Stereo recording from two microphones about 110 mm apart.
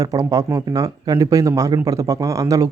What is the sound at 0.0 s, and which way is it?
Speech, 30° right (ahead or behind).